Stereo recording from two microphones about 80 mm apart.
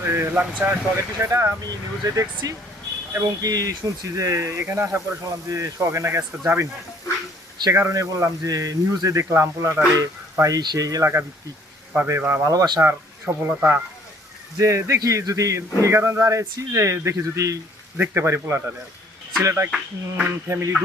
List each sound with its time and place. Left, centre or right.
0.0 s speech: right
1.6 s speech: right
5.2 s speech: right
7.7 s speech: right
9.9 s speech: right
11.9 s speech: right
12.4 s speech: right
12.8 s speech: right
17.9 s speech: right